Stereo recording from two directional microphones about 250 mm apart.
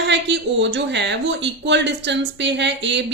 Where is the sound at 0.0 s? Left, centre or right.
Right.